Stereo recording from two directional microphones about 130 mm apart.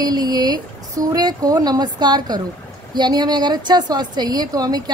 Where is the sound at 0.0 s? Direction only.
30° right (ahead or behind).